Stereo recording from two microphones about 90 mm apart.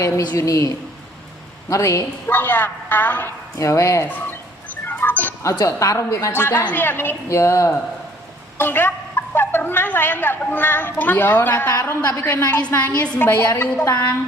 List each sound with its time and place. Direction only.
0.2 s a woman's voice: 45° left (ahead or behind)
1.7 s a woman's voice: 35° left (ahead or behind)
2.2 s a woman's voice: 20° left (ahead or behind)
3.6 s a woman's voice: 35° left (ahead or behind)
4.9 s music: 20° left (ahead or behind)
5.4 s a woman's voice: 35° left (ahead or behind)